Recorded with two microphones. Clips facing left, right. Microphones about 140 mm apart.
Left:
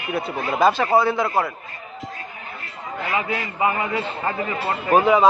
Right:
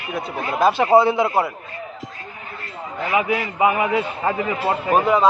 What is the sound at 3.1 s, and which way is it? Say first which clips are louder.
A man's voice: right 5 dB; 15° right (ahead or behind).